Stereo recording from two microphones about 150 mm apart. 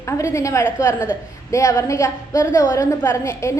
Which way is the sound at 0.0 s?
20° left (ahead or behind).